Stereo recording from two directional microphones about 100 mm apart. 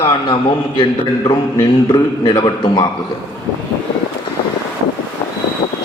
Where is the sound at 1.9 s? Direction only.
50° left (ahead or behind).